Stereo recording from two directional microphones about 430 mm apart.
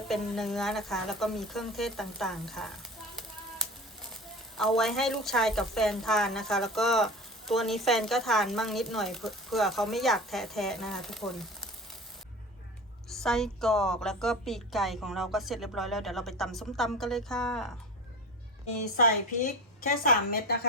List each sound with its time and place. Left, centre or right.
0.1 s a woman's voice: centre
13.1 s a woman's voice: centre
18.9 s a woman's voice: centre